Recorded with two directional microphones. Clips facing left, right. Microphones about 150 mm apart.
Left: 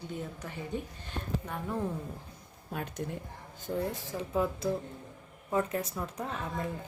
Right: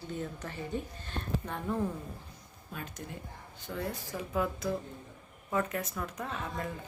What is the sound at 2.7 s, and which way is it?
Speech, 60° left (ahead or behind).